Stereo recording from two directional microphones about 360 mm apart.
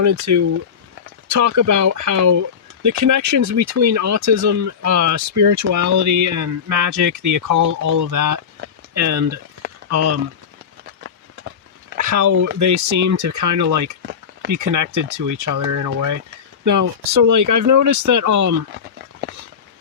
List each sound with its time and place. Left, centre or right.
0.0 s speech: right
11.9 s speech: right
17.2 s speech: right